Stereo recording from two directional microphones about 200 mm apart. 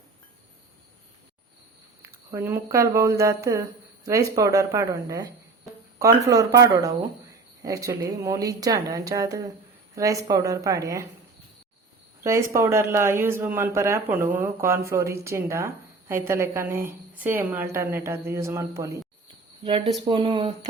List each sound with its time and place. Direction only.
2.3 s speech: 10° right (ahead or behind)
6.2 s speech: 15° right (ahead or behind)
12.2 s speech: 15° right (ahead or behind)
19.6 s speech: 25° right (ahead or behind)